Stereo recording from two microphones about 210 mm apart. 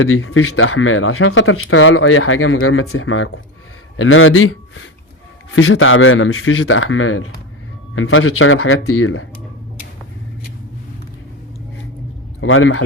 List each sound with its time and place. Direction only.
0.0 s speech: 85° left
12.4 s speech: 70° left (ahead or behind)